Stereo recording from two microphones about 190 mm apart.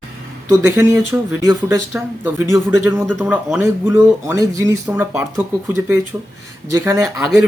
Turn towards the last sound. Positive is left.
turn(degrees=-5)  # may be behind; listen again after turning